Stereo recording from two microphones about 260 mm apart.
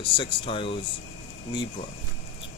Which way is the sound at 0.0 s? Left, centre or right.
Centre.